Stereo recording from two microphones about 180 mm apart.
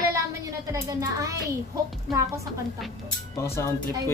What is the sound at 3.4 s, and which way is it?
Speech, 15° left (ahead or behind).